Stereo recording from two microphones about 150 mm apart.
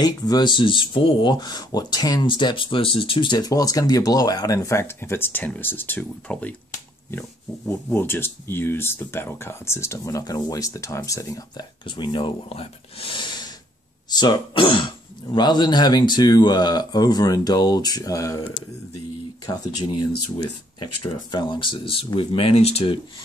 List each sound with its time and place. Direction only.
0.0 s speech: 30° left (ahead or behind)
19.4 s speech: 25° left (ahead or behind)
21.3 s speech: 30° left (ahead or behind)